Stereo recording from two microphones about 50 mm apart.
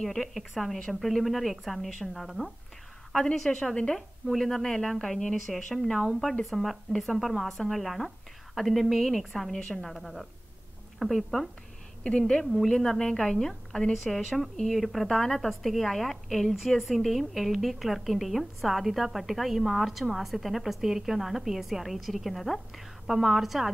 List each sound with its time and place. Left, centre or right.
0.0 s a woman's voice: centre
3.2 s a woman's voice: centre
6.5 s a woman's voice: centre
12.0 s a woman's voice: centre